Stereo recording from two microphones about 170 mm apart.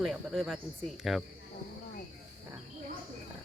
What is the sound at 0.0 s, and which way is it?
Speech, centre (ahead or behind).